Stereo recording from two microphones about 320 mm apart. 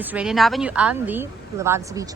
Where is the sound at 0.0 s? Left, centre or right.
Centre.